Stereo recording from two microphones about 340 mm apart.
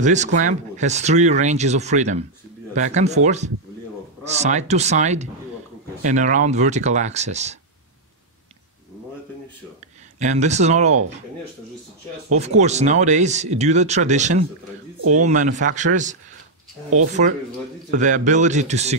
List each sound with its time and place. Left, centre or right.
0.0 s speech: right
10.1 s speech: right
12.4 s speech: centre